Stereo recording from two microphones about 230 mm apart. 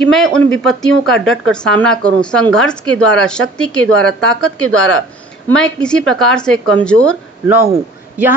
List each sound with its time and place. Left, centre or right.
0.0 s speech: centre
7.4 s a man's voice: centre